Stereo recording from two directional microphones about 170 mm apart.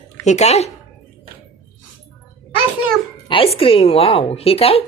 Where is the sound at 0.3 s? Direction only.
40° left (ahead or behind).